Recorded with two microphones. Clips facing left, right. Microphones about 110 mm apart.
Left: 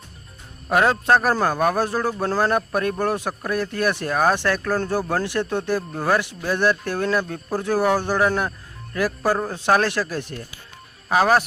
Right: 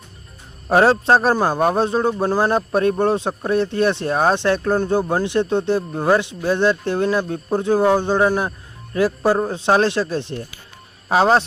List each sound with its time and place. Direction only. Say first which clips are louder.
0.7 s speech: right 4 dB; 30° right (ahead or behind)